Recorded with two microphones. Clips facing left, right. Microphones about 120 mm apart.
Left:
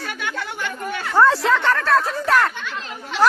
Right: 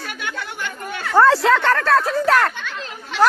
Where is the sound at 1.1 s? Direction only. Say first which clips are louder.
Right 2 dB; 70° right (ahead or behind).